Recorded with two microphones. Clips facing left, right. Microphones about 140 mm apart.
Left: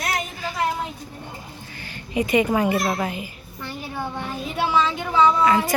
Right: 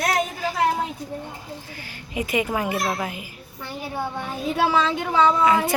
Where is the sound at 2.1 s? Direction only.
5° right (ahead or behind).